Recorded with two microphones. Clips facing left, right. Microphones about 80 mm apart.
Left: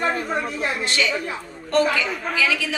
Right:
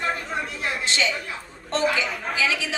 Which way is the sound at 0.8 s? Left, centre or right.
Right.